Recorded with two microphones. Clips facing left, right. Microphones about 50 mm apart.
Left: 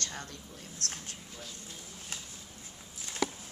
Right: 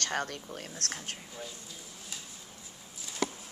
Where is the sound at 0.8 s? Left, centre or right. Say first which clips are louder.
Right 1 dB; right.